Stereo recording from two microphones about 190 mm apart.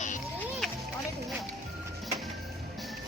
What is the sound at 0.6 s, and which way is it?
Music, centre (ahead or behind).